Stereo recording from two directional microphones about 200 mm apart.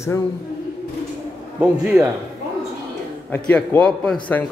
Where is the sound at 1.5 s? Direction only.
5° right (ahead or behind).